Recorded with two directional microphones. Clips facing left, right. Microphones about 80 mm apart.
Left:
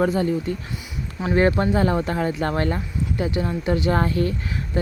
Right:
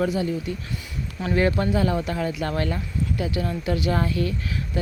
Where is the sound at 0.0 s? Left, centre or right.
Left.